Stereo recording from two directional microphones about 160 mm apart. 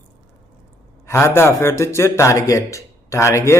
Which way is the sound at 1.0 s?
15° left (ahead or behind).